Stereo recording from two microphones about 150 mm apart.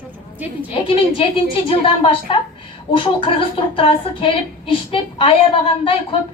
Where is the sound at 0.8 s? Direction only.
35° left (ahead or behind).